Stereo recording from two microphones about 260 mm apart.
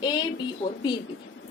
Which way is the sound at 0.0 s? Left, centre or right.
Centre.